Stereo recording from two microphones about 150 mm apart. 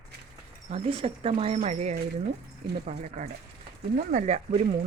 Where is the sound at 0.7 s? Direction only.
40° right (ahead or behind).